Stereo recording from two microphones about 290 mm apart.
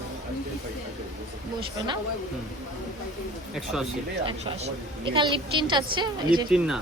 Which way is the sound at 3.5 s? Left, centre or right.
Centre.